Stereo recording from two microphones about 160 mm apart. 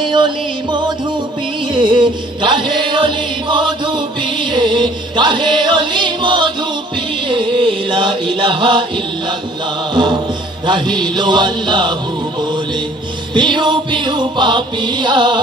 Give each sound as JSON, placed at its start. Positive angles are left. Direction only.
{"t": 0.0, "sound": "music", "side_deg": -30}
{"t": 1.7, "sound": "chant", "side_deg": -30}
{"t": 9.9, "sound": "music", "side_deg": -30}
{"t": 13.3, "sound": "music", "side_deg": -30}